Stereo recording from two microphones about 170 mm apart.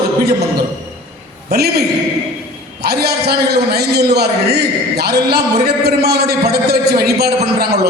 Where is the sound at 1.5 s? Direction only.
70° right (ahead or behind).